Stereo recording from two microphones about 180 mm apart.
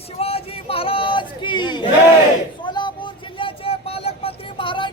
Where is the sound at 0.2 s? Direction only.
35° left (ahead or behind).